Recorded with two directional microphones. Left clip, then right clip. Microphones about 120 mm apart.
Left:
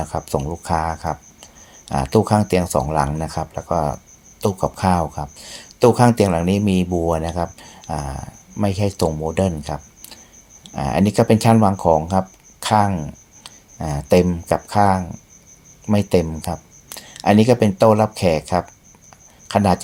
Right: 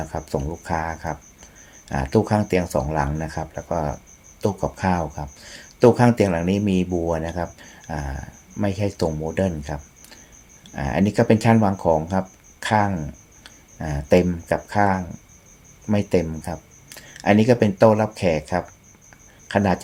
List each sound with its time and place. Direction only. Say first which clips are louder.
0.0 s speech: left 4 dB; 25° left (ahead or behind)